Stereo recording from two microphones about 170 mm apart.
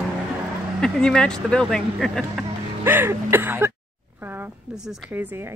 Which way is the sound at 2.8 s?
15° right (ahead or behind).